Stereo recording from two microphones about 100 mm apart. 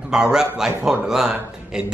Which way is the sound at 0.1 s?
5° right (ahead or behind).